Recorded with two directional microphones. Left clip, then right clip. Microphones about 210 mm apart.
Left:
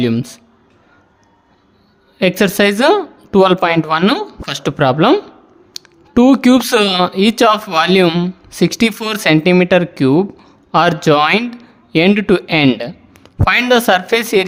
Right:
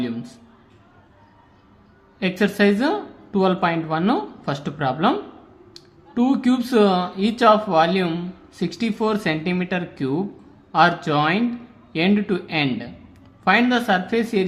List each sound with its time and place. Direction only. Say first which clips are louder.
0.0 s speech: left 11 dB; 55° left (ahead or behind)
2.1 s speech: left 8 dB; 55° left (ahead or behind)